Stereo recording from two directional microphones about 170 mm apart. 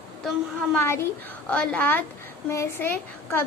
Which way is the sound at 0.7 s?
15° left (ahead or behind).